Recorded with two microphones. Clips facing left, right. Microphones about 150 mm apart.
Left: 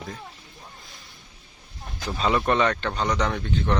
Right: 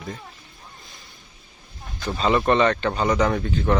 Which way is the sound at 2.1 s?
Centre (ahead or behind).